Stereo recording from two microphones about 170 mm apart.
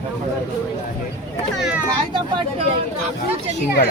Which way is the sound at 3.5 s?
60° left (ahead or behind).